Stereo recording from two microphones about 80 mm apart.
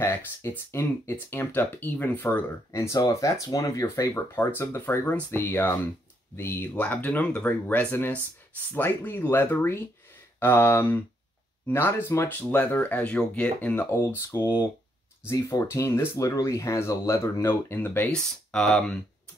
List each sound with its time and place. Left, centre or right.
0.0 s speech: left
2.7 s speech: left; by 13.7 s centre
13.7 s speech: left
17.5 s speech: left
18.1 s speech: centre